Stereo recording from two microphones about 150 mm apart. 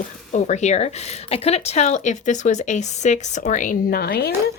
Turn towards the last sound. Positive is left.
turn(degrees=90)